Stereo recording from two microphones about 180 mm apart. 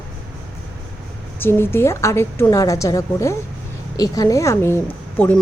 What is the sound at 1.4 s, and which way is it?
A woman's voice, 15° left (ahead or behind).